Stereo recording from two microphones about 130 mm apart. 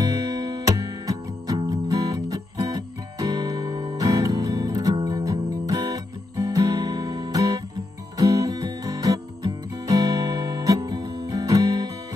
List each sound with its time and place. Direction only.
0.0 s music: 30° right (ahead or behind)
1.6 s guitar: 30° right (ahead or behind)
4.9 s music: 30° right (ahead or behind)